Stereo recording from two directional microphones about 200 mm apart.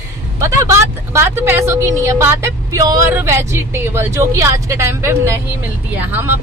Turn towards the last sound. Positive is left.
turn(degrees=-10)  # may be behind; listen again after turning